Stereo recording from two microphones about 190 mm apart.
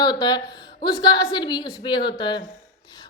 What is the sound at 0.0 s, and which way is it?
A woman's voice, 20° left (ahead or behind).